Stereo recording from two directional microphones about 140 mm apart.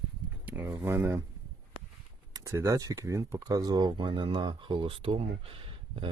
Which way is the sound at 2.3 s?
20° right (ahead or behind).